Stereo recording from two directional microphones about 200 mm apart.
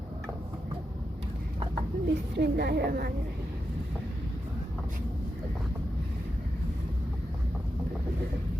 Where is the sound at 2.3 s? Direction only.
50° right (ahead or behind).